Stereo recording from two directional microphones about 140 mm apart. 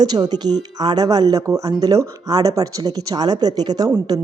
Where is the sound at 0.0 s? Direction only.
30° right (ahead or behind).